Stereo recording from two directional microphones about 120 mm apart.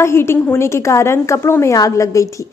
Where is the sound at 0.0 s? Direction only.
20° left (ahead or behind).